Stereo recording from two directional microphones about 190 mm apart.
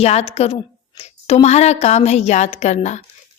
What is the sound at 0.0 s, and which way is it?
A woman's voice, 35° left (ahead or behind).